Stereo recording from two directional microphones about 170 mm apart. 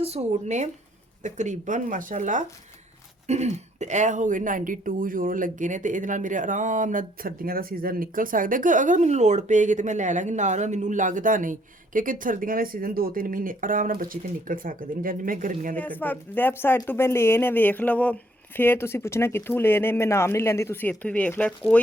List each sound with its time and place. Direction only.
0.0 s speech: 40° right (ahead or behind); by 15.7 s 55° right (ahead or behind)
15.7 s speech: 10° left (ahead or behind)